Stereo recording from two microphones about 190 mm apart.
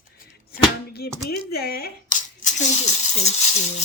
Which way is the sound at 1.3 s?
55° left (ahead or behind).